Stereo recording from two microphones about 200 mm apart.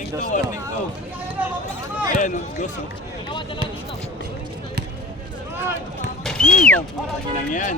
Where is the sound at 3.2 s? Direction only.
25° left (ahead or behind).